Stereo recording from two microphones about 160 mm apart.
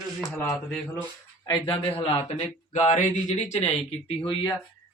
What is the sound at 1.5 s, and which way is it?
Speech, 35° left (ahead or behind).